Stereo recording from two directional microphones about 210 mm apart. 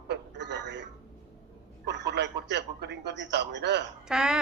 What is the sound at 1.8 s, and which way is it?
Telephone, 55° right (ahead or behind).